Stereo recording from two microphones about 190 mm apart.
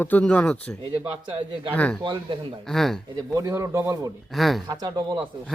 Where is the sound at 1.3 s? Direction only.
25° right (ahead or behind).